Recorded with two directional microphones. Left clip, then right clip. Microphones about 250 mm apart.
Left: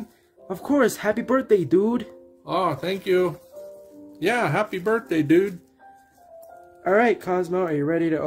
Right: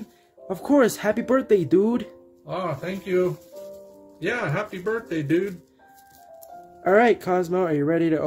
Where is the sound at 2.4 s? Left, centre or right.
Left.